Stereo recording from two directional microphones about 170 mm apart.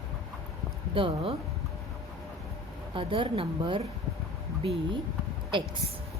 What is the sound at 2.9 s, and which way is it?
Speech, 30° right (ahead or behind).